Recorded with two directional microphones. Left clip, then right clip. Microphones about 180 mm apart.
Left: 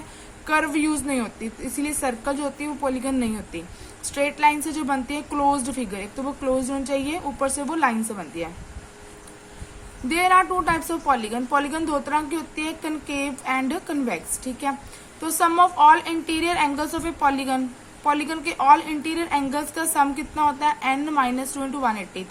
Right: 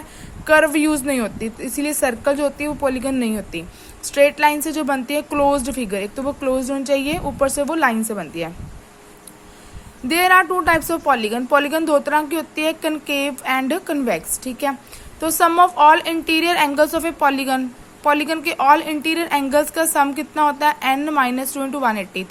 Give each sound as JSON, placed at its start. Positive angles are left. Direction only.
{"t": 0.4, "sound": "a woman's voice", "side_deg": -45}
{"t": 10.1, "sound": "a woman's voice", "side_deg": -45}